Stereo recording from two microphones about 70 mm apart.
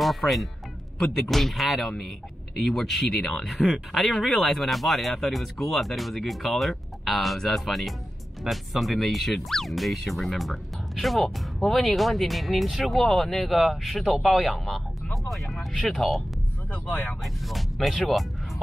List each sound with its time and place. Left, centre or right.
0.0 s music: centre
0.9 s speech: centre
16.7 s speech: left
17.2 s speech: centre